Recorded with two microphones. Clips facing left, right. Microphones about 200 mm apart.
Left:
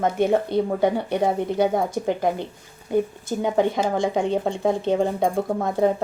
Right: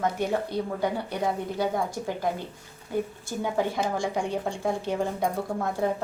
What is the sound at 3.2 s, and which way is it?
A woman's voice, 20° left (ahead or behind).